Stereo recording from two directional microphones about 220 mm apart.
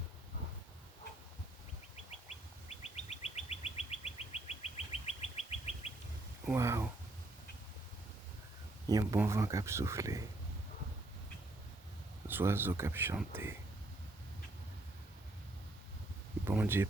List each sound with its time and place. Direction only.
2.6 s bird: 30° left (ahead or behind)
6.4 s speech: 10° right (ahead or behind)
8.9 s speech: 15° right (ahead or behind)
12.3 s speech: 10° right (ahead or behind)
16.5 s speech: 10° right (ahead or behind)